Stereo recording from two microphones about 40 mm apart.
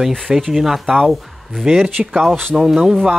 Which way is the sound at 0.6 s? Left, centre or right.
Centre.